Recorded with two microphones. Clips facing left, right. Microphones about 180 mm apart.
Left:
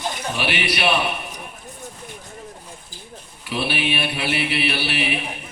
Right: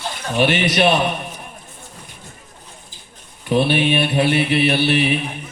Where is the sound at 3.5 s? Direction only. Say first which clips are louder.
Right 8 dB; 45° right (ahead or behind).